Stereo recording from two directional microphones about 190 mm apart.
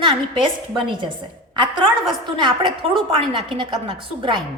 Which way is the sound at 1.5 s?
25° right (ahead or behind).